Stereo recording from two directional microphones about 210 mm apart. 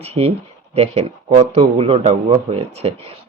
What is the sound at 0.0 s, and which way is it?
Speech, 30° right (ahead or behind).